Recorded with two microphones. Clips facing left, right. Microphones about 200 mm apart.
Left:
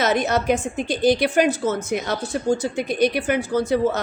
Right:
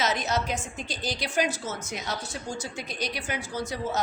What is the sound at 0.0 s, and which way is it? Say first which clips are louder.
A woman's voice: left 7 dB; 55° left (ahead or behind).